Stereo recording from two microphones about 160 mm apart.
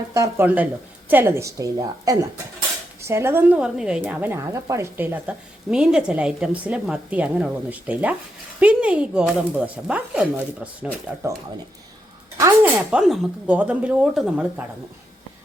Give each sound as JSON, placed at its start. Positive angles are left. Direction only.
{"t": 0.1, "sound": "speech", "side_deg": -20}
{"t": 0.4, "sound": "a woman's voice", "side_deg": -10}
{"t": 12.4, "sound": "a woman's voice", "side_deg": -10}